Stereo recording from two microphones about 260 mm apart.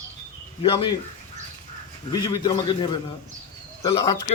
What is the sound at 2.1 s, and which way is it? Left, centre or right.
A man's voice, centre.